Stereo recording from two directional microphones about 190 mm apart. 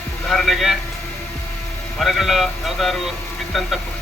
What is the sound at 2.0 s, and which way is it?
Speech, centre (ahead or behind).